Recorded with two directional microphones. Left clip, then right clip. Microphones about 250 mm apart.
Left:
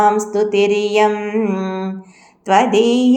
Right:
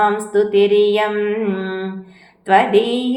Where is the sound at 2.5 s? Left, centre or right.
Left.